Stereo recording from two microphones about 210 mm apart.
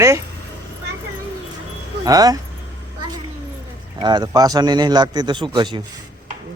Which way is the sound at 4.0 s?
20° right (ahead or behind).